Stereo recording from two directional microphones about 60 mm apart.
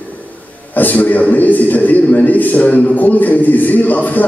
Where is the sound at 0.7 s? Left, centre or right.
Left.